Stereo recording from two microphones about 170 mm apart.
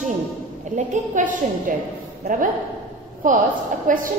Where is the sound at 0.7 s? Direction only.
45° right (ahead or behind).